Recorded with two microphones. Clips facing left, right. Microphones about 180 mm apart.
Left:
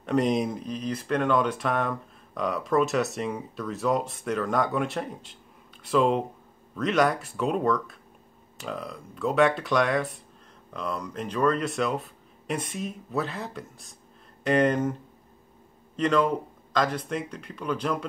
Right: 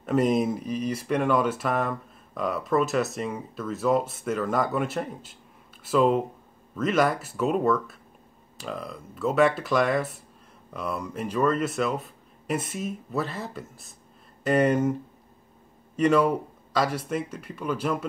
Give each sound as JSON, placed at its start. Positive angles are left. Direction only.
{"t": 0.0, "sound": "speech", "side_deg": -5}
{"t": 16.0, "sound": "speech", "side_deg": -10}